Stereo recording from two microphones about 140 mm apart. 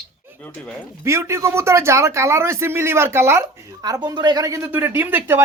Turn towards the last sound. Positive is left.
turn(degrees=-15)  # may be behind; listen again after turning